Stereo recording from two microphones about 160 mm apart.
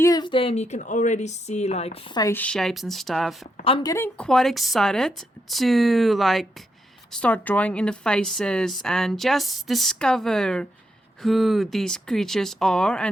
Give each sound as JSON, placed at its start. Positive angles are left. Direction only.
{"t": 0.0, "sound": "a woman's voice", "side_deg": 25}
{"t": 2.2, "sound": "speech", "side_deg": 10}
{"t": 3.8, "sound": "speech", "side_deg": 15}
{"t": 4.3, "sound": "speech", "side_deg": 0}